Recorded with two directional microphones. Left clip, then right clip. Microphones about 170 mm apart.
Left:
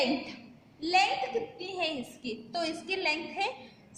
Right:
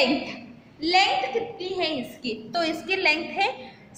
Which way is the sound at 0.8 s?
40° left (ahead or behind).